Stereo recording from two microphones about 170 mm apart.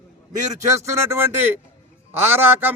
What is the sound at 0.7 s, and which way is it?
A man's voice, 15° right (ahead or behind).